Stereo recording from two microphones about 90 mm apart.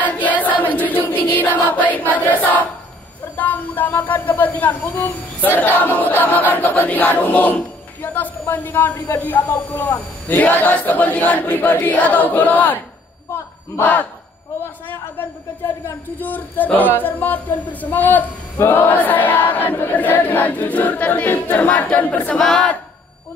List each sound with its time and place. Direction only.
0.0 s choir: 20° left (ahead or behind)
3.3 s speech: 20° left (ahead or behind)
9.2 s speech: 20° left (ahead or behind)
13.3 s a sound: 20° left (ahead or behind)
16.2 s speech: 20° left (ahead or behind)
22.4 s speech: 5° left (ahead or behind)